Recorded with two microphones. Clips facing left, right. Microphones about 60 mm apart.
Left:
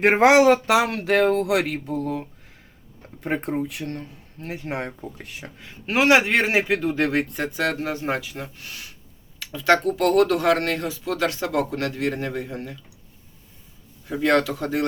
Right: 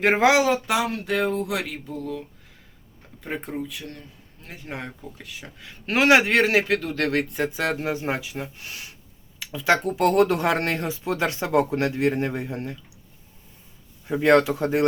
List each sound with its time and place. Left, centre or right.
0.2 s a sound: left
3.2 s speech: left
3.7 s a sound: left
4.9 s speech: left
5.8 s speech: centre
6.1 s speech: centre
6.3 s speech: centre
7.3 s speech: centre
9.4 s speech: centre
14.1 s speech: right